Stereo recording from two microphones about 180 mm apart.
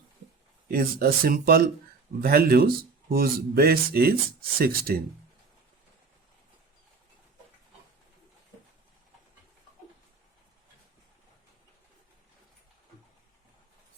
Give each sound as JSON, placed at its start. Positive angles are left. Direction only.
{"t": 0.7, "sound": "speech", "side_deg": -55}